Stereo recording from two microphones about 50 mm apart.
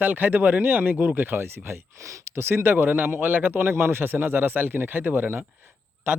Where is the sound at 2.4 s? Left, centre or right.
Right.